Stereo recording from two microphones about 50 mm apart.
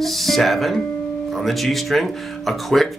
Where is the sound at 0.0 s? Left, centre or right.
Centre.